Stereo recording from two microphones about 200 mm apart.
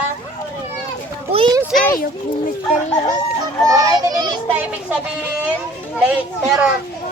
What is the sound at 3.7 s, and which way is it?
Speech, 20° right (ahead or behind).